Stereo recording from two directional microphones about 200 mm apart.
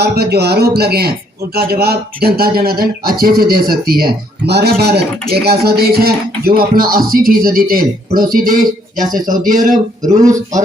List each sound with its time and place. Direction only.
0.0 s speech: 55° right (ahead or behind)